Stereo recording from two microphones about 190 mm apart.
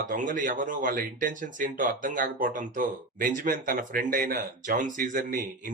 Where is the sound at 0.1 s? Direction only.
45° right (ahead or behind).